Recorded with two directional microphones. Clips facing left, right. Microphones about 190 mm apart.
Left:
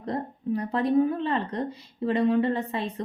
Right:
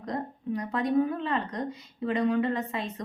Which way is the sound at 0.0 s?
30° left (ahead or behind).